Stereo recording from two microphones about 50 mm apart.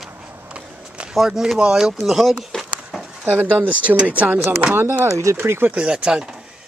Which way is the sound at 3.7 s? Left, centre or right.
Right.